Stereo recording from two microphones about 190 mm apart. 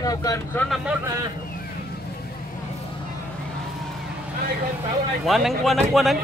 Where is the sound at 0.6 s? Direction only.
Centre (ahead or behind).